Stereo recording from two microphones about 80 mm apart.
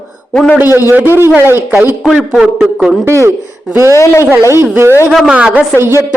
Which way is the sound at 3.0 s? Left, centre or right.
Right.